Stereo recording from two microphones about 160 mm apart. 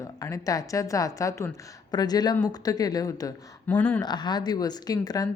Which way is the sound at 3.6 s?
10° left (ahead or behind).